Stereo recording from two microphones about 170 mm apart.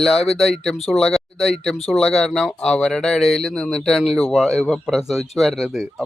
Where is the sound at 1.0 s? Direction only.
Centre (ahead or behind).